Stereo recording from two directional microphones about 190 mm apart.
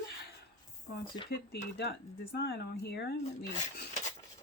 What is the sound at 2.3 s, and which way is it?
Speech, 60° left (ahead or behind).